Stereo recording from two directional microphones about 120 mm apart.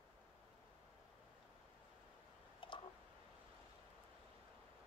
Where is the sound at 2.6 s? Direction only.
45° left (ahead or behind).